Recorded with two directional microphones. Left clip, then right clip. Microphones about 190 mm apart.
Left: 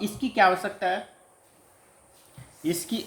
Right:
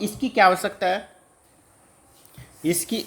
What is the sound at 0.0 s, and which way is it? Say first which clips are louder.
A woman's voice: right 4 dB; 50° right (ahead or behind).